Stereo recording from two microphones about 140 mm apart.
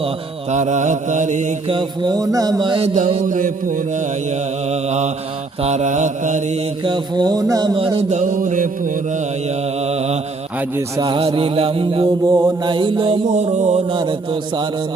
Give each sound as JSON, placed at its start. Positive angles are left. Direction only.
{"t": 0.5, "sound": "mantra", "side_deg": -55}
{"t": 1.6, "sound": "music", "side_deg": -35}
{"t": 2.8, "sound": "mantra", "side_deg": -65}
{"t": 6.8, "sound": "music", "side_deg": -30}
{"t": 7.9, "sound": "mantra", "side_deg": -55}
{"t": 9.8, "sound": "mantra", "side_deg": -50}
{"t": 10.6, "sound": "mantra", "side_deg": -20}
{"t": 11.0, "sound": "music", "side_deg": -40}
{"t": 12.0, "sound": "mantra", "side_deg": -20}
{"t": 12.6, "sound": "music", "side_deg": -35}
{"t": 13.2, "sound": "mantra", "side_deg": -55}
{"t": 13.9, "sound": "music", "side_deg": -35}